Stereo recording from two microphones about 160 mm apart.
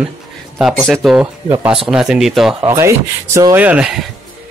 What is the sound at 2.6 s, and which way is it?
Speech, 15° right (ahead or behind).